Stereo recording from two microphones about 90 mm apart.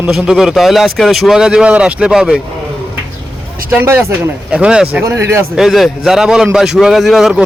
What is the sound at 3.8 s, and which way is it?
Speech, 30° right (ahead or behind).